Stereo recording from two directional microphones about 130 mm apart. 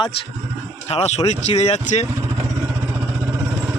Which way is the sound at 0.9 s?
55° left (ahead or behind).